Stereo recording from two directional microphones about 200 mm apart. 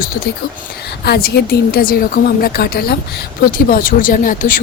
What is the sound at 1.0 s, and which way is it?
Speech, 55° left (ahead or behind).